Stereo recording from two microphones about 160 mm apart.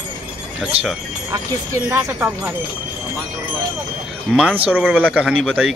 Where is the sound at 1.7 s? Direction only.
15° right (ahead or behind).